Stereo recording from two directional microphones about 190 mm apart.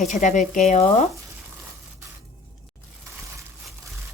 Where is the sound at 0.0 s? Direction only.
40° left (ahead or behind).